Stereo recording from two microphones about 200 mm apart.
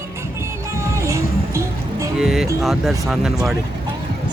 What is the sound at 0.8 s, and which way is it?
Music, 15° right (ahead or behind).